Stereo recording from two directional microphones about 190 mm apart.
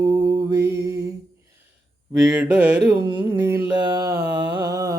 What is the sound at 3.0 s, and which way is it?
Mantra, 25° right (ahead or behind).